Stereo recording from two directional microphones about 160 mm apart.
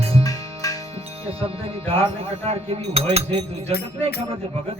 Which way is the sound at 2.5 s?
40° right (ahead or behind).